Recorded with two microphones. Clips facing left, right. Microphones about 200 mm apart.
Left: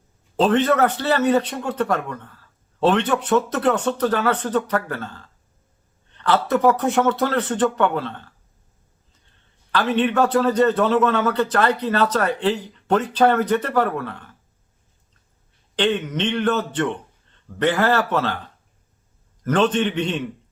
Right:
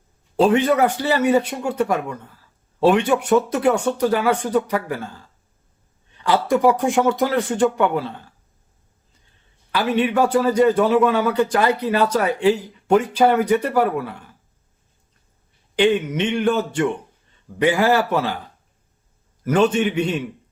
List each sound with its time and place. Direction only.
0.3 s a man's voice: 10° right (ahead or behind)
9.7 s a man's voice: 10° right (ahead or behind)
15.7 s a man's voice: 10° right (ahead or behind)
19.5 s a man's voice: 10° right (ahead or behind)